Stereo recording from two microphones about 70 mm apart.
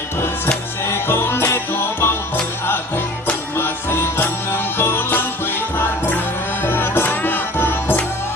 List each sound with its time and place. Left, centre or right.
0.9 s music: left
3.6 s music: left